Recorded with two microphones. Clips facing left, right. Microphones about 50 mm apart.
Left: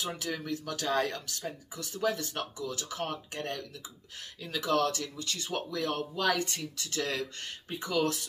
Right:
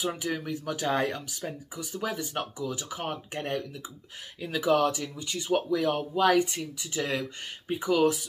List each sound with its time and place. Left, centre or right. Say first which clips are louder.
0.0 s speech: right 4 dB; centre